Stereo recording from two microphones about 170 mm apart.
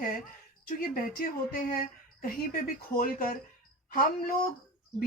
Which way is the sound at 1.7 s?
60° left (ahead or behind).